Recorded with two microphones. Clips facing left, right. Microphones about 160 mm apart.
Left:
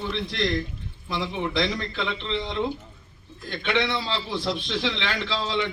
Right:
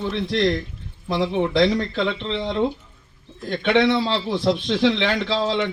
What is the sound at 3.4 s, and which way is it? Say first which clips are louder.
A man's voice: right 8 dB; 55° right (ahead or behind).